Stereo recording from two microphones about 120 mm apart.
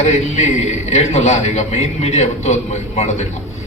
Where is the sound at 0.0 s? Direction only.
70° left (ahead or behind).